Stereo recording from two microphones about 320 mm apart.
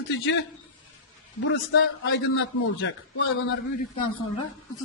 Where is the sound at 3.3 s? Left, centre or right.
Left.